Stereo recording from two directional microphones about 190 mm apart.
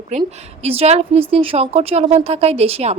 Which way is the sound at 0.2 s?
30° right (ahead or behind).